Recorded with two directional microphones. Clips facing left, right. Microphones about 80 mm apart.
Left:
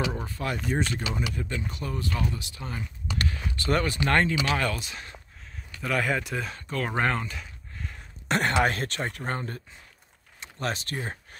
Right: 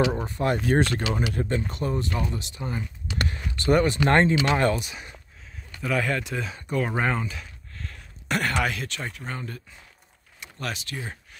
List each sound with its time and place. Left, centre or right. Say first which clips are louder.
0.1 s speech: right 6 dB; right
0.7 s speech: right 6 dB; right
1.4 s speech: right 6 dB; right
4.7 s speech: right 4 dB; centre
5.8 s speech: right 1 dB; centre
6.5 s speech: right 4 dB; centre
7.7 s a sound: left 1 dB; centre
8.3 s speech: left 2 dB; left